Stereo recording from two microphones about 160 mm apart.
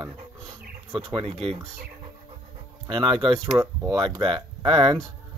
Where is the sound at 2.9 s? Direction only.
30° right (ahead or behind).